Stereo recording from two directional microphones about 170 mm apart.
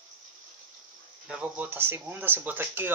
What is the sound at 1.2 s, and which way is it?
Speech, 5° right (ahead or behind).